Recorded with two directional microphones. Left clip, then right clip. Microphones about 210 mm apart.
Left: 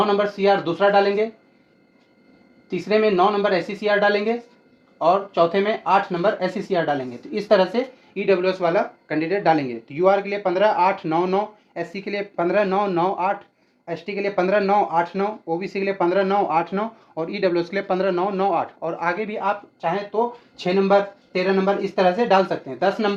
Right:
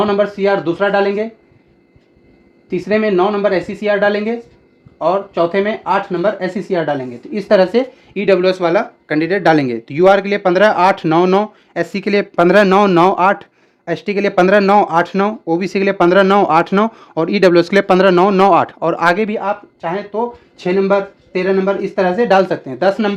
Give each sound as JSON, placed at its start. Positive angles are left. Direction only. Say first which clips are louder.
{"t": 0.0, "sound": "speech", "louder": "right 5 dB", "side_deg": -35}
{"t": 2.6, "sound": "speech", "louder": "right 4 dB", "side_deg": -35}
{"t": 19.4, "sound": "speech", "louder": "right 4 dB", "side_deg": -35}